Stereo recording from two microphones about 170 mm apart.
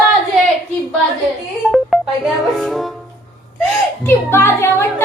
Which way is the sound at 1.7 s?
Centre (ahead or behind).